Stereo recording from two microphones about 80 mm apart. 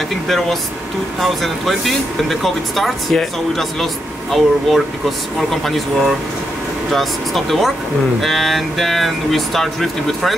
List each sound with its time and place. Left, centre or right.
1.2 s speech: centre